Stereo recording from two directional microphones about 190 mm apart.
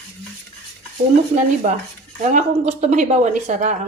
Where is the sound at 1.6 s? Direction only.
35° right (ahead or behind).